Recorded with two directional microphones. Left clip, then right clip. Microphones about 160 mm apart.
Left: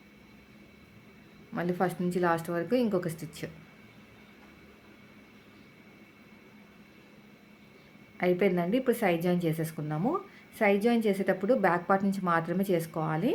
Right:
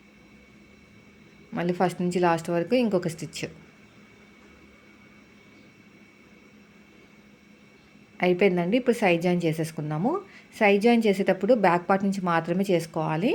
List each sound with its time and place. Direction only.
1.5 s speech: 20° right (ahead or behind)
8.2 s speech: 20° right (ahead or behind)